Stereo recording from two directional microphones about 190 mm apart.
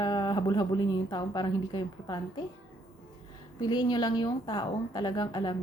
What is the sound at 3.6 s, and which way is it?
A woman's voice, 20° left (ahead or behind).